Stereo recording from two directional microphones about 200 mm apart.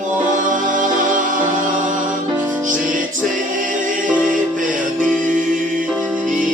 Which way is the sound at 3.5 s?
40° right (ahead or behind).